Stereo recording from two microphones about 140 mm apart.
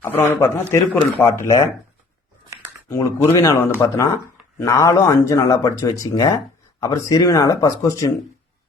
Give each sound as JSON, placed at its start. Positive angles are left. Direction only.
{"t": 0.0, "sound": "a man's voice", "side_deg": 15}
{"t": 2.9, "sound": "speech", "side_deg": 20}